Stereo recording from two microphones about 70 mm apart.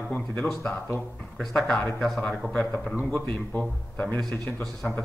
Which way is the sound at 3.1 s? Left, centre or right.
Left.